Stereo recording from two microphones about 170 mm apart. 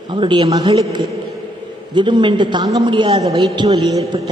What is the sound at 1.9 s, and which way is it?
A man's voice, 25° right (ahead or behind).